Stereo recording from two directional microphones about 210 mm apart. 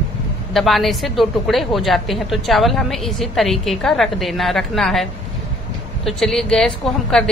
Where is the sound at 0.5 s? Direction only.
Centre (ahead or behind).